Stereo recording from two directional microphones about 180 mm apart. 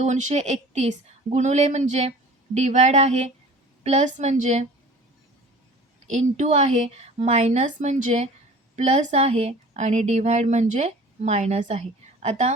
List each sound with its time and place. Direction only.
0.0 s a woman's voice: 40° right (ahead or behind)
6.1 s a woman's voice: 40° right (ahead or behind)